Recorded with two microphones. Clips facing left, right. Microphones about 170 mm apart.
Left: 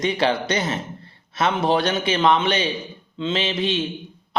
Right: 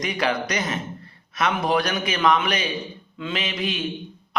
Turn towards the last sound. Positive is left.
turn(degrees=30)  # may be behind; listen again after turning